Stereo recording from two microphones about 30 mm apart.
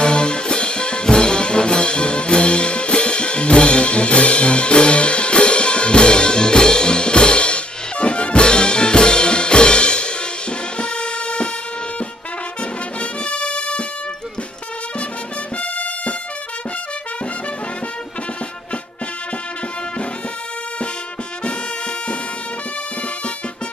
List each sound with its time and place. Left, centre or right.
0.0 s music: left
13.0 s music: left
15.5 s music: left